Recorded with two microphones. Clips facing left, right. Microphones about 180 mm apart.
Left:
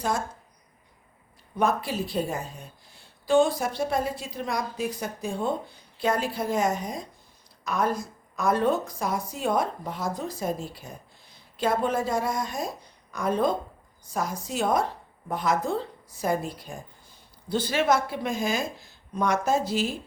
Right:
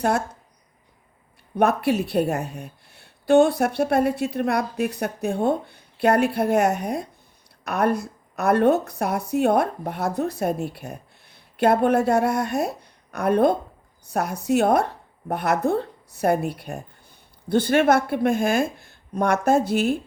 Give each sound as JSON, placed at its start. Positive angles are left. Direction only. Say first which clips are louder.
{"t": 1.5, "sound": "a woman's voice", "louder": "right 6 dB", "side_deg": -65}